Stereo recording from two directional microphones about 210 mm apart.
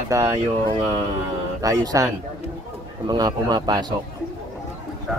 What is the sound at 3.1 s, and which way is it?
Speech, 20° right (ahead or behind).